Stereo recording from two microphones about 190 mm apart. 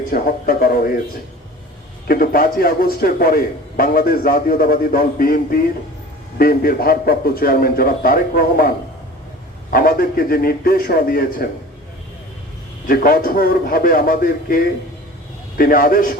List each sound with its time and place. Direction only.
0.1 s a man's voice: 50° left (ahead or behind)
2.0 s a man's voice: 50° left (ahead or behind)
12.9 s a man's voice: 50° left (ahead or behind)